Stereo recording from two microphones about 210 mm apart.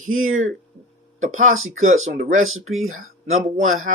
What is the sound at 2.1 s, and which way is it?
Speech, 40° right (ahead or behind).